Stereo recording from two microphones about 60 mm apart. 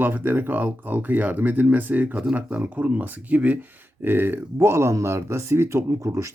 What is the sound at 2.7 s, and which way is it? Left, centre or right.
Speech, right.